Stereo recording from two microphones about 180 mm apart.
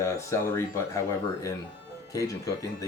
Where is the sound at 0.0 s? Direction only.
15° left (ahead or behind).